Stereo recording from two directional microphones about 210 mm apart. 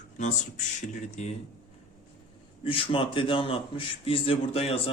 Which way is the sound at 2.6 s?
25° left (ahead or behind).